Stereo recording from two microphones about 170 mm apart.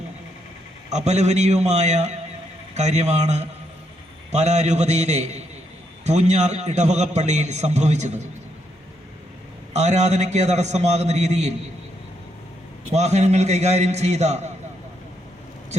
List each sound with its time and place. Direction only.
0.9 s a man's voice: 40° right (ahead or behind)
9.7 s a man's voice: 40° right (ahead or behind)
12.9 s a man's voice: 40° right (ahead or behind)